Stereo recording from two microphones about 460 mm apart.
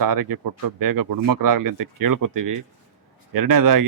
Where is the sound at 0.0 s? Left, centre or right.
Right.